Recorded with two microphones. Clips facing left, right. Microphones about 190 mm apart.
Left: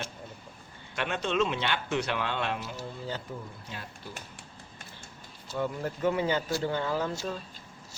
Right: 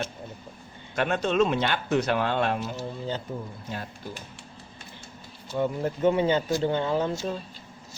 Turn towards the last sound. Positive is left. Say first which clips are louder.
# right 4 dB
turn(degrees=-25)  # may be behind; listen again after turning